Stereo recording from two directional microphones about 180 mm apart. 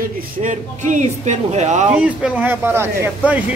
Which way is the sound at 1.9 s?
5° right (ahead or behind).